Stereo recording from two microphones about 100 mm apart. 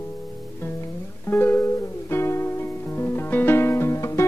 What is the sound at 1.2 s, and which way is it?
Music, 25° left (ahead or behind).